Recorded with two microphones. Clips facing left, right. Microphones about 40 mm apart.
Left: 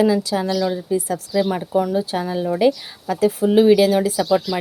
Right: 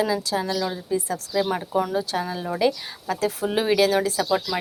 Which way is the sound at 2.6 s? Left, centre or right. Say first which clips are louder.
Left 5 dB; left.